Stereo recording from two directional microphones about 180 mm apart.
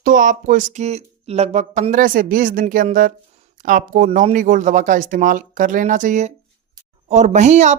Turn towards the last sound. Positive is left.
turn(degrees=-40)  # may be behind; listen again after turning